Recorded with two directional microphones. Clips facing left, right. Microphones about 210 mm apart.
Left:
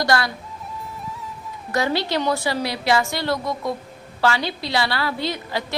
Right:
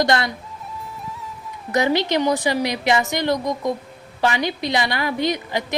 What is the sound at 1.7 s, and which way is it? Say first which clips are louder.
A woman's voice: right 3 dB; 20° right (ahead or behind).